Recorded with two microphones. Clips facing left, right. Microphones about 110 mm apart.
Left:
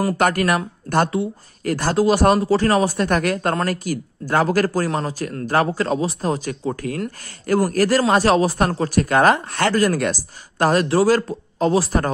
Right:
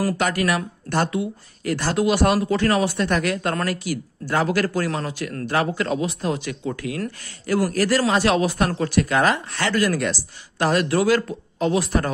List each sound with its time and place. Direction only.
0.2 s speech: 50° left (ahead or behind)